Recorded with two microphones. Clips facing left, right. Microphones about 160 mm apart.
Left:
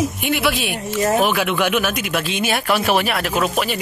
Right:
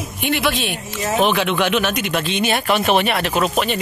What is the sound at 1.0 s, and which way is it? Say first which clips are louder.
Speech: left 2 dB; 50° left (ahead or behind).